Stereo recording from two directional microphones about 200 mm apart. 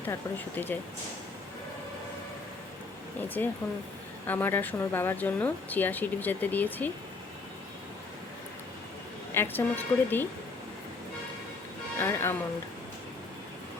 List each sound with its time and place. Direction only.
0.0 s speech: 10° left (ahead or behind)
3.2 s speech: 10° left (ahead or behind)
9.3 s speech: 10° left (ahead or behind)
11.9 s speech: 10° left (ahead or behind)